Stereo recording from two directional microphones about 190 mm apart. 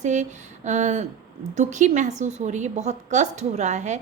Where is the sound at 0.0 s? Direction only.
40° right (ahead or behind).